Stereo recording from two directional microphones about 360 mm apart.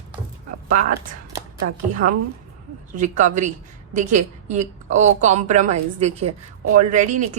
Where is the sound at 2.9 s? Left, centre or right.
Right.